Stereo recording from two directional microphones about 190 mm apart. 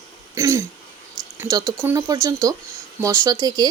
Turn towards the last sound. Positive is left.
turn(degrees=-20)  # may be behind; listen again after turning